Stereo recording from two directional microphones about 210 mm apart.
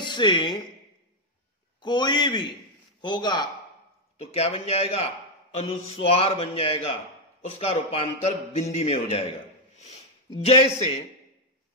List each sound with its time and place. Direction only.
0.0 s speech: 20° left (ahead or behind)
1.8 s a man's voice: 20° left (ahead or behind)